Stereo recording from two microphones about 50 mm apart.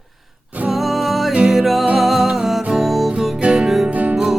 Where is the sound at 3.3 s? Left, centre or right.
Right.